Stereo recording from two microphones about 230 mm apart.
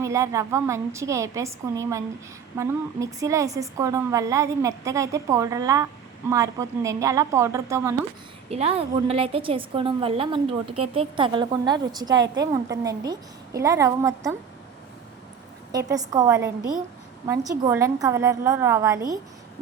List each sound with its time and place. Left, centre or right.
0.0 s a woman's voice: centre
8.4 s a woman's voice: right
15.7 s a woman's voice: centre